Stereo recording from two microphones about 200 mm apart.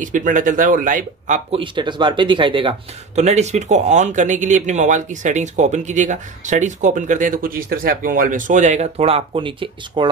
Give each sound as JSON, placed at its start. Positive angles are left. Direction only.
{"t": 0.0, "sound": "speech", "side_deg": -40}